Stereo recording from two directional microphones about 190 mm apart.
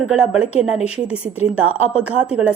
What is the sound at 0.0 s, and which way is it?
A woman's voice, 5° right (ahead or behind).